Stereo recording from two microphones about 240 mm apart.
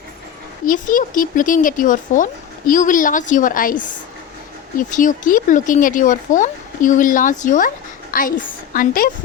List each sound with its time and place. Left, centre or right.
0.6 s speech: left